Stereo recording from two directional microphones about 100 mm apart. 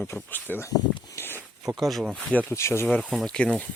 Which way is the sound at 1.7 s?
Centre (ahead or behind).